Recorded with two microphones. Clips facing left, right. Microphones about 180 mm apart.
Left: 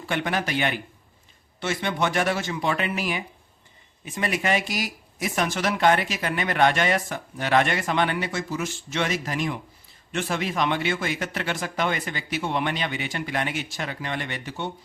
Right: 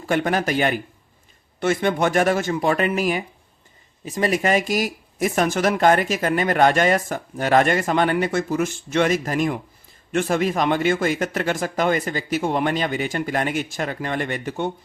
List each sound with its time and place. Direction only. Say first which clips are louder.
0.0 s speech: right 6 dB; 45° right (ahead or behind)